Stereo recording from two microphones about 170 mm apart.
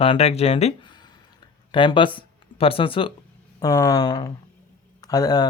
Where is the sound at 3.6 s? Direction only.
20° left (ahead or behind).